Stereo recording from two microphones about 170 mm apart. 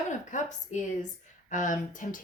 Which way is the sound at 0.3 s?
45° left (ahead or behind).